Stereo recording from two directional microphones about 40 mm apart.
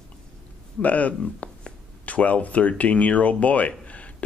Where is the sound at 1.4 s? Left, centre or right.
Left.